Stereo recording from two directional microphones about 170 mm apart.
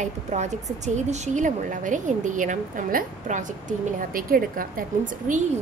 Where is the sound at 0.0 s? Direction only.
45° right (ahead or behind).